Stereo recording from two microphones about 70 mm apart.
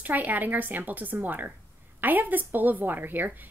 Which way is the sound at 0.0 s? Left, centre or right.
Right.